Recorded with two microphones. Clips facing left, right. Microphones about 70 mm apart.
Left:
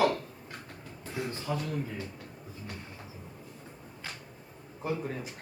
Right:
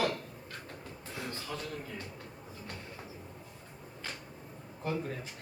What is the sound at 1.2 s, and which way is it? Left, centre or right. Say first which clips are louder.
Speech: left 6 dB; centre.